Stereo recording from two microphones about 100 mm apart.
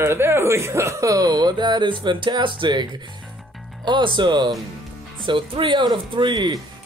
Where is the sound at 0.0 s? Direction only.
25° right (ahead or behind).